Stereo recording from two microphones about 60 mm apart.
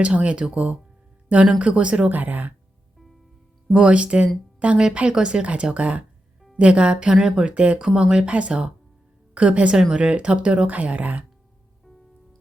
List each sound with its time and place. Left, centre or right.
0.0 s speech: centre
3.7 s speech: centre